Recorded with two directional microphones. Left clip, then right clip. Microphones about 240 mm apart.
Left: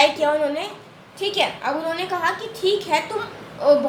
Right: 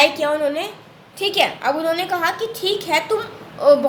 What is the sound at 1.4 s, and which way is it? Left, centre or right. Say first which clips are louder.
A woman's voice: right 4 dB; right.